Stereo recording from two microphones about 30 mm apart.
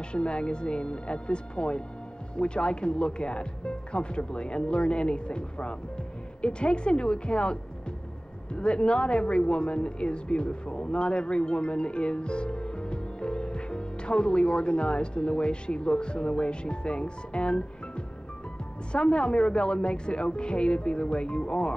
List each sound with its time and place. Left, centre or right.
0.1 s speech: left
8.5 s speech: left